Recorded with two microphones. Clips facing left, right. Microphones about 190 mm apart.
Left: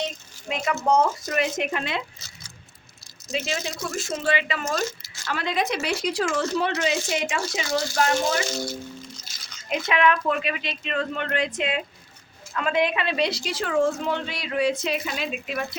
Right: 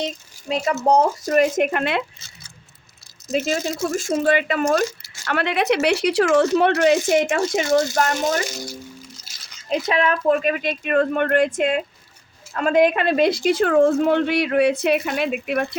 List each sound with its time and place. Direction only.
0.4 s speech: 35° right (ahead or behind); by 2.2 s 65° right (ahead or behind)
3.3 s speech: 45° right (ahead or behind)
9.6 s speech: 35° right (ahead or behind); by 15.6 s 60° right (ahead or behind)